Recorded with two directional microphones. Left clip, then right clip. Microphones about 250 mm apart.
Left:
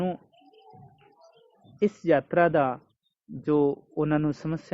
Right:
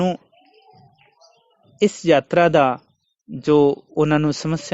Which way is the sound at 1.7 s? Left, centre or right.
Right.